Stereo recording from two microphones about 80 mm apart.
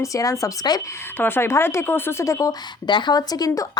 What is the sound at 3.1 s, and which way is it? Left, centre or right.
Speech, left.